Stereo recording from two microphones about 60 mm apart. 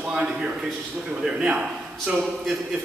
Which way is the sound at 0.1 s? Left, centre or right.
Centre.